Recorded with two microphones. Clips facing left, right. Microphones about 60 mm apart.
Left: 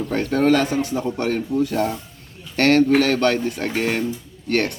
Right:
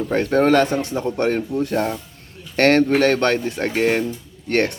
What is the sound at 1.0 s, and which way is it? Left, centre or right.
Speech, right.